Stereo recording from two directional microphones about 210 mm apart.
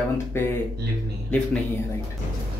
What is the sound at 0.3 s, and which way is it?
Speech, 10° left (ahead or behind).